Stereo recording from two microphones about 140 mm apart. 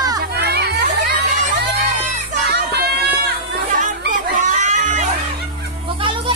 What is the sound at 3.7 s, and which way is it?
Crowd, 70° right (ahead or behind).